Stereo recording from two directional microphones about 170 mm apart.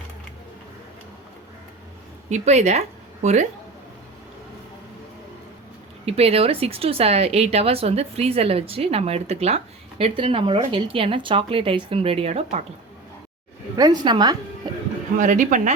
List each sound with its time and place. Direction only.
2.3 s speech: 40° right (ahead or behind)
6.1 s a woman's voice: 35° right (ahead or behind)
13.7 s a woman's voice: 25° right (ahead or behind)
15.2 s speech: 45° right (ahead or behind)